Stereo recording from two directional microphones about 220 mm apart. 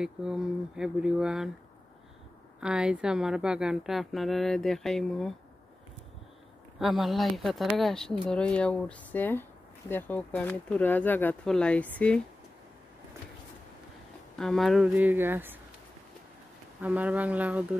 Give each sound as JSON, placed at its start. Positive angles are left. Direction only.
{"t": 0.0, "sound": "speech", "side_deg": -5}
{"t": 2.6, "sound": "speech", "side_deg": -5}
{"t": 6.8, "sound": "speech", "side_deg": 0}
{"t": 14.4, "sound": "speech", "side_deg": 0}
{"t": 16.8, "sound": "speech", "side_deg": -5}